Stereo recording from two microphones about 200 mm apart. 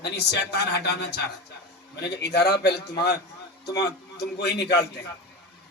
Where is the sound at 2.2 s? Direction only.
55° left (ahead or behind).